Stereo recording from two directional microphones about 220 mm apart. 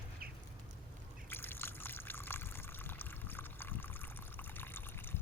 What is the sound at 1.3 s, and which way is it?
Water, 10° left (ahead or behind).